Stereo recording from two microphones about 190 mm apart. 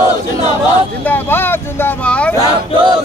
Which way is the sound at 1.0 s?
10° left (ahead or behind).